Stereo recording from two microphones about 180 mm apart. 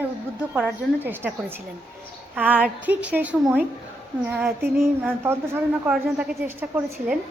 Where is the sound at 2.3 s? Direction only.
10° right (ahead or behind).